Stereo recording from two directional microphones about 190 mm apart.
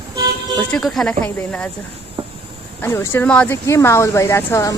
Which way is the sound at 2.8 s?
10° left (ahead or behind).